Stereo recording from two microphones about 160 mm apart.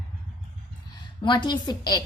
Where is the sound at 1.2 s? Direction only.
30° left (ahead or behind).